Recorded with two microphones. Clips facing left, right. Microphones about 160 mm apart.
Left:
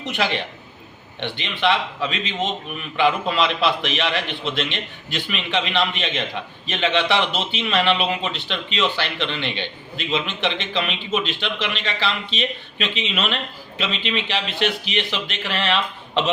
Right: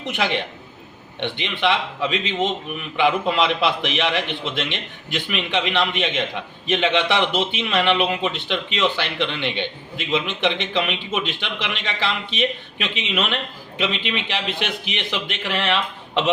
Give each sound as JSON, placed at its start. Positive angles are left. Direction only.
{"t": 0.1, "sound": "a man's voice", "side_deg": -20}